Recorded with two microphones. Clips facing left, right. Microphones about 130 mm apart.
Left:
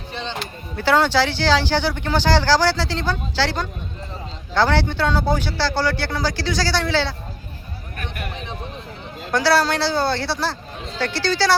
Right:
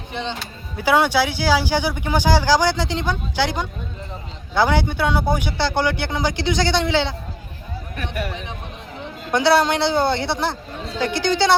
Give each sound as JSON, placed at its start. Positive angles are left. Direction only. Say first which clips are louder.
{"t": 0.1, "sound": "speech", "louder": "right 1 dB", "side_deg": -15}
{"t": 9.3, "sound": "speech", "louder": "right 2 dB", "side_deg": -20}